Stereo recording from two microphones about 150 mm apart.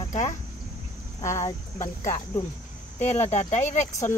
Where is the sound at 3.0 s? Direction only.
50° left (ahead or behind).